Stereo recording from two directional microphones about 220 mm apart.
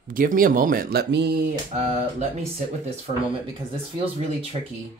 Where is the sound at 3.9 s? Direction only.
25° right (ahead or behind).